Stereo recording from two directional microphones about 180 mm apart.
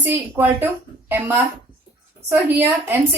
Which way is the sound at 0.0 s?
10° right (ahead or behind).